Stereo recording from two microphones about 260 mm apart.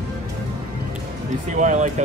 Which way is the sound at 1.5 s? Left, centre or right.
Right.